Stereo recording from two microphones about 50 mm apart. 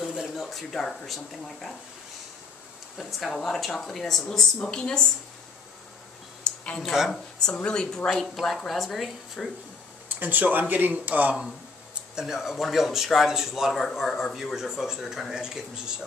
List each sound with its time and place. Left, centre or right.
0.0 s a sound: centre
0.4 s speech: centre
3.0 s speech: centre
3.3 s speech: centre
3.5 s speech: centre
6.4 s a sound: left
6.8 s speech: centre
7.3 s speech: centre
8.4 s speech: centre
10.0 s speech: right
12.2 s speech: centre